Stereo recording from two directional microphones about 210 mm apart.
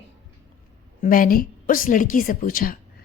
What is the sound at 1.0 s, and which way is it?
A woman's voice, 40° left (ahead or behind).